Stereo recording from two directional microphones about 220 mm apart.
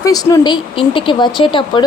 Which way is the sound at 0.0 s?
15° left (ahead or behind).